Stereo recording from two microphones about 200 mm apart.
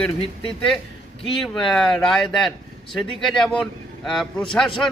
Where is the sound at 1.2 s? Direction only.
Centre (ahead or behind).